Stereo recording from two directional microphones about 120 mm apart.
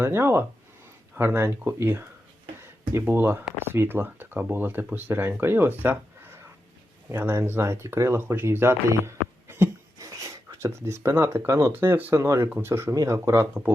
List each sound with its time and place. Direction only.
0.0 s speech: 20° right (ahead or behind)
5.8 s a sound: 20° right (ahead or behind)
7.2 s speech: 20° right (ahead or behind)